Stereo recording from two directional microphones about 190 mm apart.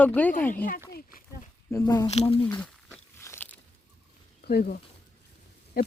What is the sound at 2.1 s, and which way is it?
Speech, 30° left (ahead or behind).